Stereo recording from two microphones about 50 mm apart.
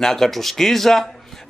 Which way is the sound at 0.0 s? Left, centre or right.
Centre.